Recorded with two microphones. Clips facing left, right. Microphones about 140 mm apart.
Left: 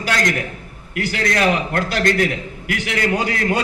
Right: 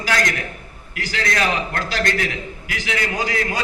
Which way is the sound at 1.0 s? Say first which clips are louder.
Left 3 dB; 60° left (ahead or behind).